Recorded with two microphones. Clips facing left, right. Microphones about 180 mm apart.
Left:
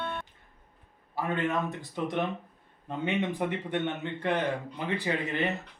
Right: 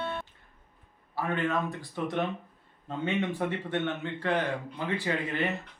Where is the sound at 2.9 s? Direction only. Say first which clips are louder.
Even; 15° left (ahead or behind).